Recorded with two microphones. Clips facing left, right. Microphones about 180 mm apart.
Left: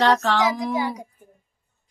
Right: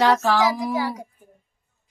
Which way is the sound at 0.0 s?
5° right (ahead or behind).